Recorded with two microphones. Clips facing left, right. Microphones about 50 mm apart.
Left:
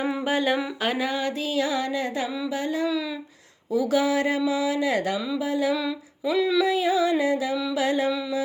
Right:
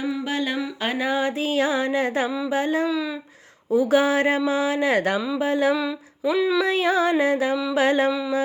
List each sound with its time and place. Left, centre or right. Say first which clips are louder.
0.3 s a sound: left 5 dB; centre
0.8 s a sound: right 1 dB; centre
1.4 s speech: right 3 dB; right
5.4 s music: right 5 dB; right
5.7 s humming: right 2 dB; centre
6.7 s music: right 2 dB; right